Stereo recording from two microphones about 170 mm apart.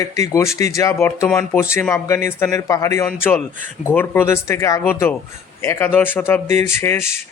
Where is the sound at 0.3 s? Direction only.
20° left (ahead or behind).